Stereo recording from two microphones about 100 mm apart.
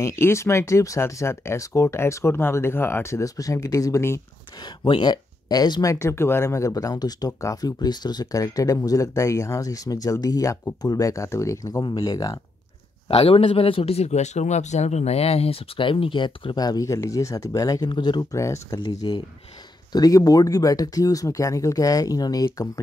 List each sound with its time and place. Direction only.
0.0 s speech: 25° left (ahead or behind)
4.8 s speech: 50° left (ahead or behind); by 11.8 s 30° left (ahead or behind)
11.8 s speech: 40° left (ahead or behind)
13.1 s speech: 75° left (ahead or behind); by 17.8 s 35° left (ahead or behind)
17.8 s speech: 50° left (ahead or behind)
18.3 s speech: 30° left (ahead or behind)
18.8 s speech: 50° left (ahead or behind)
19.9 s speech: 35° left (ahead or behind)